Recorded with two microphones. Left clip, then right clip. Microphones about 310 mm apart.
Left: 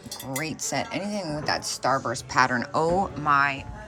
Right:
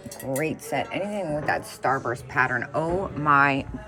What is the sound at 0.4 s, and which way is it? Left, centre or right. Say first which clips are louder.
Cutlery: right 3 dB; centre.